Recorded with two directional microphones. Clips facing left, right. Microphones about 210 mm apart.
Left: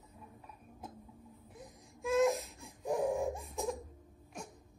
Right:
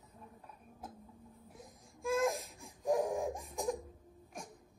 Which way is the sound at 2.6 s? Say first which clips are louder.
Right 1 dB; 15° right (ahead or behind).